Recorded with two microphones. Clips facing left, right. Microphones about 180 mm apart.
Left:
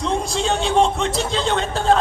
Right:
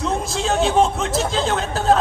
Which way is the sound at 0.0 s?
5° right (ahead or behind).